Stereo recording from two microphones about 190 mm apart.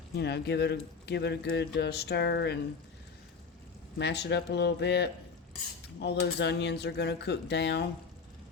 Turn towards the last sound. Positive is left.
turn(degrees=65)  # may be behind; listen again after turning